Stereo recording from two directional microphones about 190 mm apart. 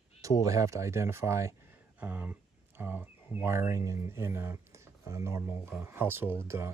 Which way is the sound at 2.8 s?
10° right (ahead or behind).